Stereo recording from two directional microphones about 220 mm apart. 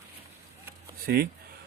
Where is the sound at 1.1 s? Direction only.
40° right (ahead or behind).